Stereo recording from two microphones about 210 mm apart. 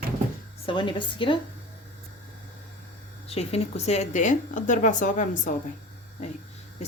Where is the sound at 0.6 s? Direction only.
25° left (ahead or behind).